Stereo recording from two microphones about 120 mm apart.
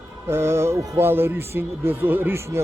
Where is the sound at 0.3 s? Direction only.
20° right (ahead or behind).